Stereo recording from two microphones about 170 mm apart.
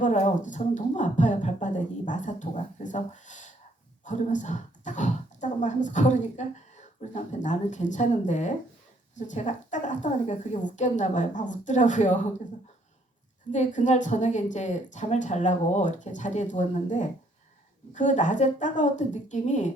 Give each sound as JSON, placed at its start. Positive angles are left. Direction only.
{"t": 0.0, "sound": "speech", "side_deg": 45}
{"t": 13.5, "sound": "speech", "side_deg": 45}